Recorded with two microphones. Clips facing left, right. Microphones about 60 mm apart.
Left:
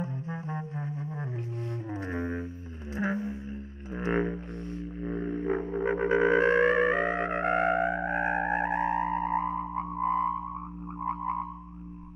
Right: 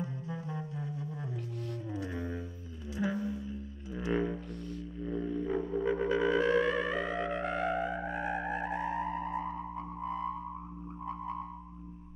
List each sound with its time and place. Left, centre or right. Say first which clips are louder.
0.0 s music: left 3 dB; left
3.0 s a sound: left 3 dB; left
3.9 s didgeridoo: left 3 dB; left
11.1 s music: left 8 dB; left